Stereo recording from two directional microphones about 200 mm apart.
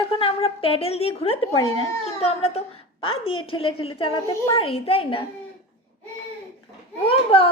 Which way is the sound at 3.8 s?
30° left (ahead or behind).